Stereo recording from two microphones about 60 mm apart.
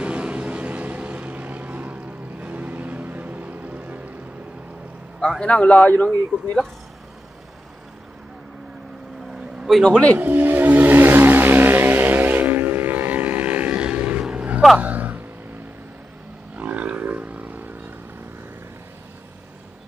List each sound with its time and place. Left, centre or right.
0.0 s vehicle: right
5.4 s speech: centre
9.8 s speech: centre
10.1 s a sound: right
14.3 s vehicle: right
14.8 s a sound: right
16.5 s wild animals: right